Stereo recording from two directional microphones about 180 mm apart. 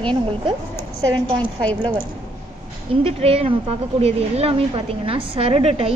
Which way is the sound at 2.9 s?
30° right (ahead or behind).